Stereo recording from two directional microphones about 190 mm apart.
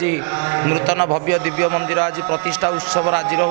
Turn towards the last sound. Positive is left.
turn(degrees=-20)  # may be behind; listen again after turning